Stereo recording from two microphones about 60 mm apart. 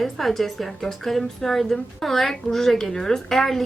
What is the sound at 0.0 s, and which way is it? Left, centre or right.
A woman's voice, centre.